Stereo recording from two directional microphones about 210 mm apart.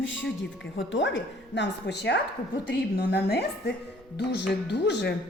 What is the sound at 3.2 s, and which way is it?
Speech, 50° left (ahead or behind).